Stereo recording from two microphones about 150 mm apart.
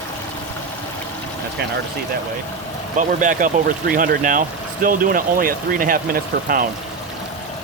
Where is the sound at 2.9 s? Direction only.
60° right (ahead or behind).